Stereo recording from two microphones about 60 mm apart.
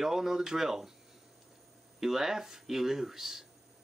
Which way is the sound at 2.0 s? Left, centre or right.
Centre.